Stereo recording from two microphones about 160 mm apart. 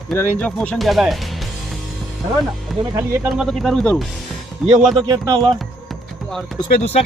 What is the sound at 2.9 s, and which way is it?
Speech, 15° right (ahead or behind).